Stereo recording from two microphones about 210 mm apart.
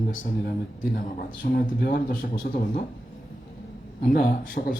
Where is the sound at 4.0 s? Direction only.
45° left (ahead or behind).